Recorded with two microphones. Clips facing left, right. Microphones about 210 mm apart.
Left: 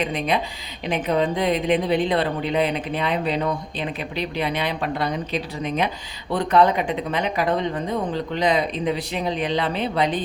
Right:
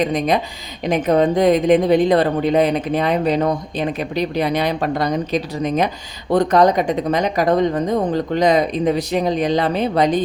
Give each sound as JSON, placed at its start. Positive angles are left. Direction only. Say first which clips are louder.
{"t": 0.0, "sound": "a woman's voice", "louder": "right 5 dB", "side_deg": -40}